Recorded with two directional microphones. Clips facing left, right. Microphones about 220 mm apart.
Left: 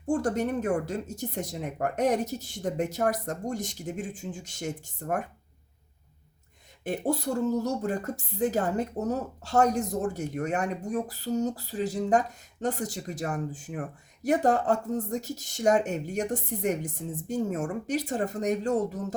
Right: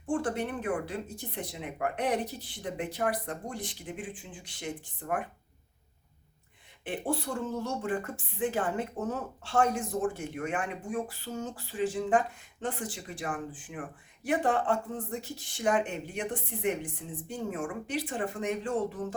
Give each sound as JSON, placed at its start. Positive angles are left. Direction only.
{"t": 0.0, "sound": "speech", "side_deg": 40}
{"t": 6.8, "sound": "a woman's voice", "side_deg": 40}